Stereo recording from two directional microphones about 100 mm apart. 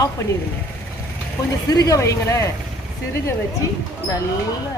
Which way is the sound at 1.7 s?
35° left (ahead or behind).